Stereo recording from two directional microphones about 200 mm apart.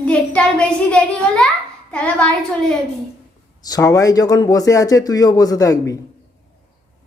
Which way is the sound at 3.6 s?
20° left (ahead or behind).